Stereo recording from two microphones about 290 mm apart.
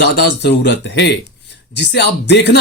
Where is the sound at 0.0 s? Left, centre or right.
Left.